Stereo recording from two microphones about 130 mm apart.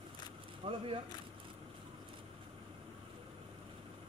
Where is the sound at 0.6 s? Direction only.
50° right (ahead or behind).